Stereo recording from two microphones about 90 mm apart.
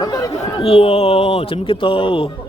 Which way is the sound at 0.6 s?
90° left.